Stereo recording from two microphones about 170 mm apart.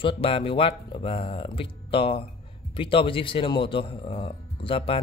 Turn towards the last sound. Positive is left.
turn(degrees=30)  # may be behind; listen again after turning